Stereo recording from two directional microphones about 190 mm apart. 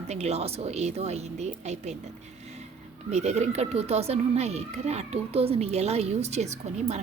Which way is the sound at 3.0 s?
35° right (ahead or behind).